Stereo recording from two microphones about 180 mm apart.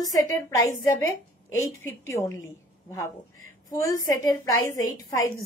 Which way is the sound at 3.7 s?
20° left (ahead or behind).